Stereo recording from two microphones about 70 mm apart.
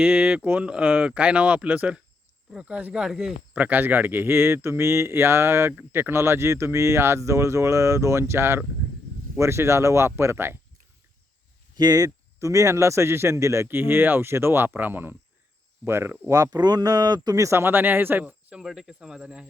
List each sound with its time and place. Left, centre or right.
0.0 s speech: right; by 3.3 s centre
3.5 s speech: right
11.7 s speech: right
13.7 s speech: right
16.3 s speech: right
17.3 s speech: right
18.5 s speech: centre